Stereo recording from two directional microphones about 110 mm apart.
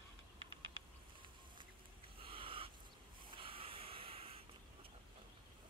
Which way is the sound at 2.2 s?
55° right (ahead or behind).